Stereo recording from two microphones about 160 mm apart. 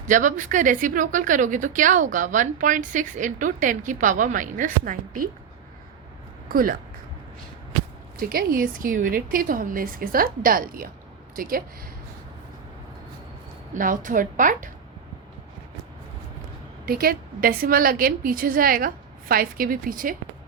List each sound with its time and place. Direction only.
0.1 s a woman's voice: 55° right (ahead or behind)
6.5 s a woman's voice: 65° right (ahead or behind)
8.2 s a woman's voice: 65° right (ahead or behind)
13.7 s a woman's voice: 55° right (ahead or behind)
16.8 s a woman's voice: 70° right (ahead or behind)